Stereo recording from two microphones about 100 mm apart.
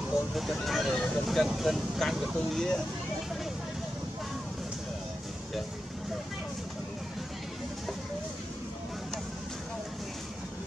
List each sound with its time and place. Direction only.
0.3 s speech: centre (ahead or behind)